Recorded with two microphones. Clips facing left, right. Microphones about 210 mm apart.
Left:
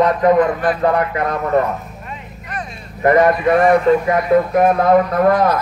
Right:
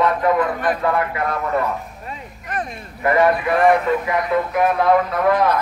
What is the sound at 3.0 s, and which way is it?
A man's voice, 40° left (ahead or behind).